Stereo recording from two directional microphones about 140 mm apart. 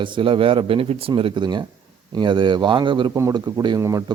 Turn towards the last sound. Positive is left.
turn(degrees=-25)  # may be behind; listen again after turning